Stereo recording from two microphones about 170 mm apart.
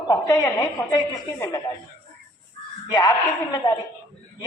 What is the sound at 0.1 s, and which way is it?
Speech, 20° left (ahead or behind).